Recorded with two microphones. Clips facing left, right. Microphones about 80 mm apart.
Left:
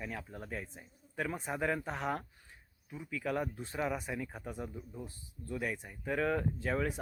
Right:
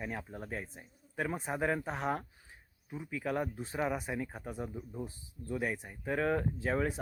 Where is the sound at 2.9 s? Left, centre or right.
Centre.